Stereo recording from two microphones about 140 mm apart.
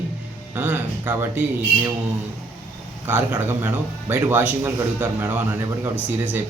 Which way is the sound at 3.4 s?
15° right (ahead or behind).